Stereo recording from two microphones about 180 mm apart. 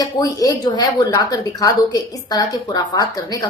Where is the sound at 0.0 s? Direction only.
20° left (ahead or behind).